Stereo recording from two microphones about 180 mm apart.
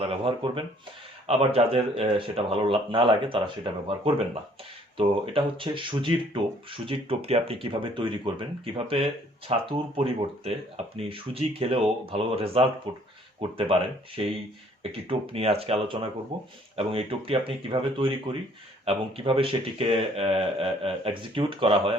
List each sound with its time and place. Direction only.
0.0 s speech: 30° right (ahead or behind)
14.2 s speech: 30° right (ahead or behind)